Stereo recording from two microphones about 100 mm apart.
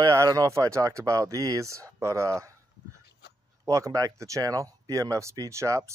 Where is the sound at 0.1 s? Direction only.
35° right (ahead or behind).